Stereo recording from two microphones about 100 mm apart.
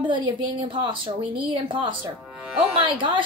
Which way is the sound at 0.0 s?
55° right (ahead or behind).